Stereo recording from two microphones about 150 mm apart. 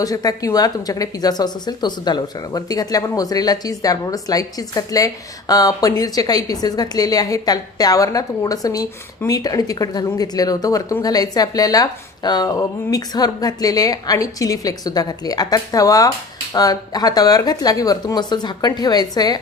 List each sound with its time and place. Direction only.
0.0 s a woman's voice: 25° left (ahead or behind)